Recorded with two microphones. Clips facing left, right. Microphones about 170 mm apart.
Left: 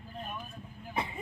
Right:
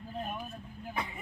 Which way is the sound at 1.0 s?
25° left (ahead or behind).